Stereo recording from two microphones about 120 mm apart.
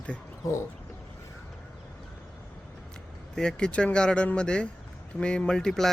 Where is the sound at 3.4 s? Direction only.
5° left (ahead or behind).